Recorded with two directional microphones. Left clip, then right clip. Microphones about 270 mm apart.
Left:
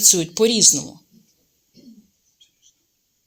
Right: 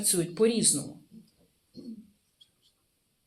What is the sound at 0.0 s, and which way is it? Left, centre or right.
Speech, left.